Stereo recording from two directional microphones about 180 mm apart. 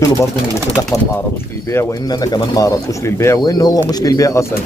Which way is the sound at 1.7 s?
20° left (ahead or behind).